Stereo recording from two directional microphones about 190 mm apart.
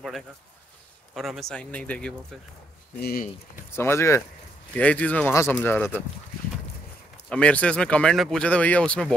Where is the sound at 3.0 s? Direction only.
50° left (ahead or behind).